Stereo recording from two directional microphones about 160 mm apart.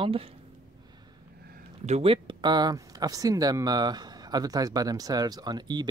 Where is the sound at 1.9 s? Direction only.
35° right (ahead or behind).